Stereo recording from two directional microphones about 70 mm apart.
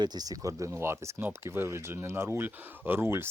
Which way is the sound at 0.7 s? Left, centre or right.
Right.